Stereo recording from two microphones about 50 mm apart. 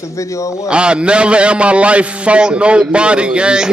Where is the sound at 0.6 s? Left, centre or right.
Centre.